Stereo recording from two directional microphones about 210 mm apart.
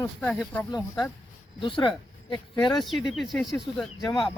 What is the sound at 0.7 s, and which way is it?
Speech, 20° left (ahead or behind).